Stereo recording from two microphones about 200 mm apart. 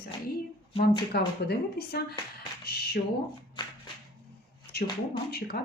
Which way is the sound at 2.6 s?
50° left (ahead or behind).